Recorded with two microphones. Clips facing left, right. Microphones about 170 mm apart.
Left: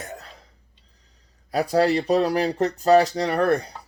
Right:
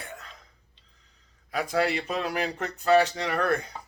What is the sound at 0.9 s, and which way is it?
Speech, 40° left (ahead or behind).